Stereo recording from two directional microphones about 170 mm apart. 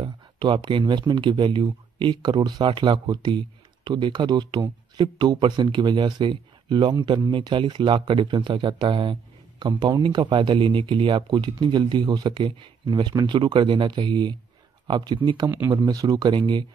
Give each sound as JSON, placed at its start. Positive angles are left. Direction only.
{"t": 0.0, "sound": "speech", "side_deg": -25}